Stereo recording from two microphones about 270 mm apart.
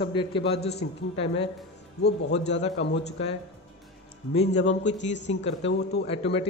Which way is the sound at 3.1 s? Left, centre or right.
Left.